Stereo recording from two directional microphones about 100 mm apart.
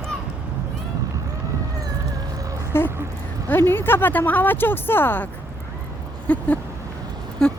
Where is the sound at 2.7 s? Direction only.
25° left (ahead or behind).